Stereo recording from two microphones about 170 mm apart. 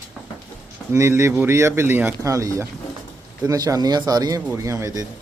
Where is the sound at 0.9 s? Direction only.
15° right (ahead or behind).